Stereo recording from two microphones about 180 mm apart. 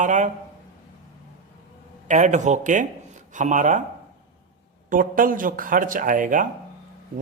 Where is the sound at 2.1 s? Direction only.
40° right (ahead or behind).